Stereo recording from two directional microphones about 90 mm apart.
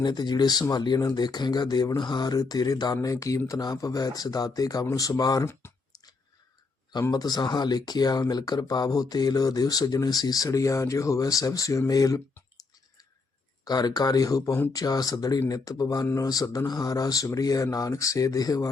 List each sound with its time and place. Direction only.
0.0 s speech: 50° left (ahead or behind)
7.1 s speech: 45° left (ahead or behind)
13.7 s speech: 50° left (ahead or behind)